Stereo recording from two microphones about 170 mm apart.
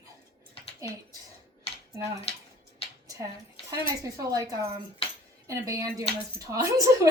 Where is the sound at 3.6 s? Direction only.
20° right (ahead or behind).